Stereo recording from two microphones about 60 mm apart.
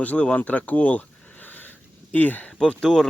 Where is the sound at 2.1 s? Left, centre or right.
Left.